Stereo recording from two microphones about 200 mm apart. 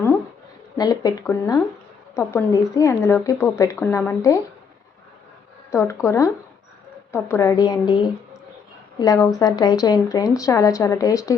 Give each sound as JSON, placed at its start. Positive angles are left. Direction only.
{"t": 0.8, "sound": "a woman's voice", "side_deg": 20}
{"t": 5.7, "sound": "a woman's voice", "side_deg": 15}